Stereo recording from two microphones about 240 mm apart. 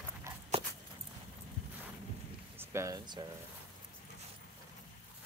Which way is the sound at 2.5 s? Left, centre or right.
Centre.